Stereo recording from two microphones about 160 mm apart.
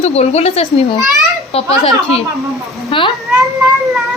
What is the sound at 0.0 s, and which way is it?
Speech, 40° left (ahead or behind).